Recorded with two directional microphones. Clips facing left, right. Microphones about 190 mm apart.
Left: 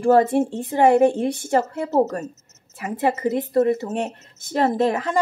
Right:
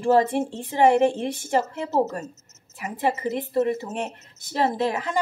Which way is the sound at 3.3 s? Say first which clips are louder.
Left 4 dB; 45° left (ahead or behind).